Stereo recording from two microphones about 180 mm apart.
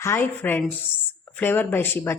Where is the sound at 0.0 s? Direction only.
10° left (ahead or behind).